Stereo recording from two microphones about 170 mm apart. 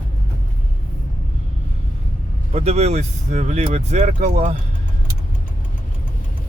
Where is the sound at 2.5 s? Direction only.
40° right (ahead or behind).